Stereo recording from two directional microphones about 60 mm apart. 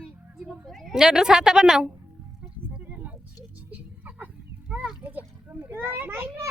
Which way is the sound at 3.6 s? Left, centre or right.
Right.